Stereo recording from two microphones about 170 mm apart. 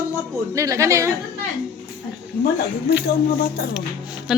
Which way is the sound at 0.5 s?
20° right (ahead or behind).